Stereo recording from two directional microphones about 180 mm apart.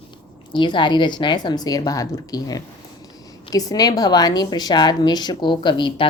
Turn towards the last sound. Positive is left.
turn(degrees=25)  # may be behind; listen again after turning